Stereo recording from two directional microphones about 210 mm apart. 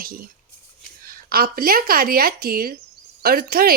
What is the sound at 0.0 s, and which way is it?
A woman's voice, 45° right (ahead or behind).